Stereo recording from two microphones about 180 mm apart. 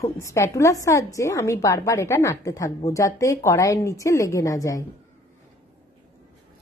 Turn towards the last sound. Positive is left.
turn(degrees=20)  # may be behind; listen again after turning